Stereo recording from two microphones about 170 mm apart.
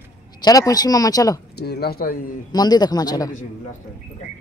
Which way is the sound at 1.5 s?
70° left (ahead or behind).